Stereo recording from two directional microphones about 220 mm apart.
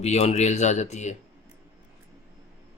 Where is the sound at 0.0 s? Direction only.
30° left (ahead or behind).